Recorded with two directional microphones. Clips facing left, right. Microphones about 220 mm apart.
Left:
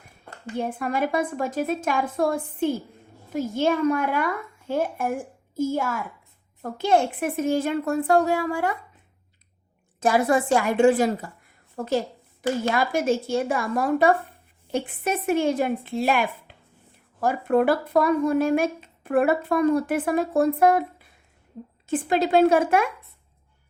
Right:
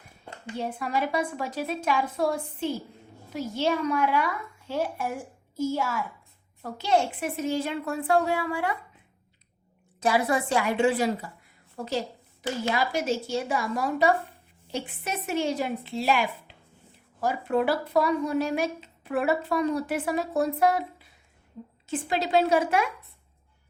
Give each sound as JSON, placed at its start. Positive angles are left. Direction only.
{"t": 0.5, "sound": "speech", "side_deg": 50}
{"t": 10.0, "sound": "speech", "side_deg": 45}